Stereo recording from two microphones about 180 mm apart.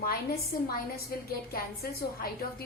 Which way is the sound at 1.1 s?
55° left (ahead or behind).